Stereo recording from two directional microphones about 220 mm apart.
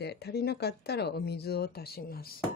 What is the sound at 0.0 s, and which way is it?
A woman's voice, 50° left (ahead or behind).